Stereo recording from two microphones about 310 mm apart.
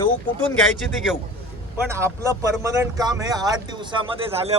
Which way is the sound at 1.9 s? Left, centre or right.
Centre.